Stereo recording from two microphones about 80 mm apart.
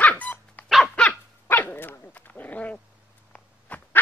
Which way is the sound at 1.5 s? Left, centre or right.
Left.